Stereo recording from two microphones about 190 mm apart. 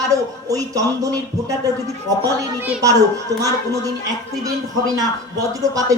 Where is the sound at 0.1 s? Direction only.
20° right (ahead or behind).